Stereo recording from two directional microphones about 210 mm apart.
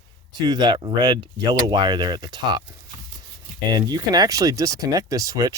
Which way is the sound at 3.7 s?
20° right (ahead or behind).